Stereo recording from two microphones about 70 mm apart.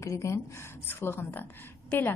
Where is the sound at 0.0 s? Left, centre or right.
Left.